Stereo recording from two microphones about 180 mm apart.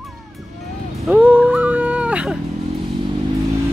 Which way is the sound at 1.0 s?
10° right (ahead or behind).